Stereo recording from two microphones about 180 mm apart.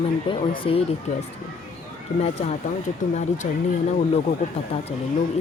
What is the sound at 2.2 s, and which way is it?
Speech, 40° left (ahead or behind).